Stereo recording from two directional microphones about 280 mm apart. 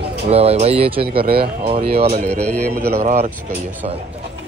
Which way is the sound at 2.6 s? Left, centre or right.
Right.